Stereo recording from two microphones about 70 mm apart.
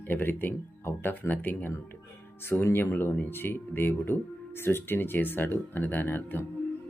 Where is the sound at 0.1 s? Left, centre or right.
Left.